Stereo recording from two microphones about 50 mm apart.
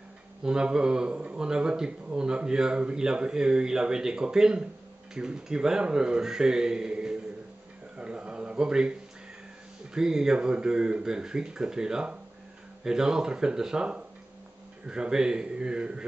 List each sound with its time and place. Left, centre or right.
0.4 s a man's voice: centre
8.0 s a sound: right
9.9 s a man's voice: centre